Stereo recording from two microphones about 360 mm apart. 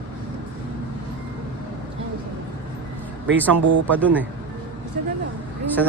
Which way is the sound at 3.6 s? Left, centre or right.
Right.